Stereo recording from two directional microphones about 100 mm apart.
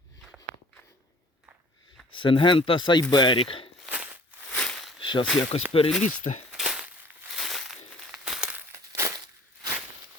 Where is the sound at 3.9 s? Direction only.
10° right (ahead or behind).